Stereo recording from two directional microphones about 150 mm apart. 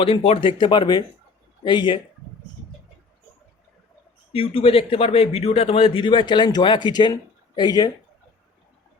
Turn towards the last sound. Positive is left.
turn(degrees=25)  # may be behind; listen again after turning